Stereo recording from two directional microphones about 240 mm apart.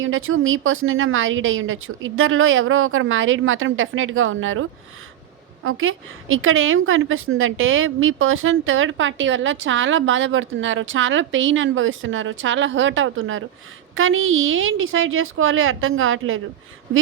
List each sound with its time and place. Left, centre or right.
0.0 s a woman's voice: right
5.6 s a woman's voice: right